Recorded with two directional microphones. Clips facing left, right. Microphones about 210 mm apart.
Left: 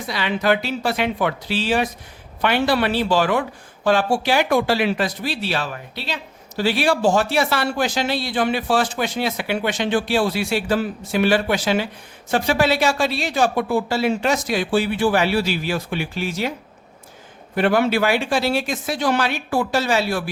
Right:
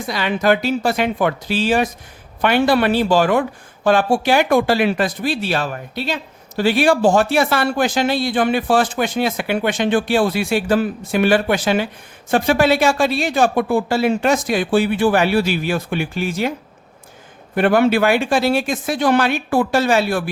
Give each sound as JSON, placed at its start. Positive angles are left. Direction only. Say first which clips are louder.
{"t": 0.0, "sound": "speech", "louder": "right 3 dB", "side_deg": -45}
{"t": 17.5, "sound": "speech", "louder": "right 3 dB", "side_deg": -50}